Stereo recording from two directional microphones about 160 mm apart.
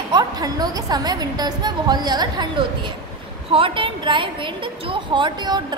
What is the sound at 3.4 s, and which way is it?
A woman's voice, 35° right (ahead or behind).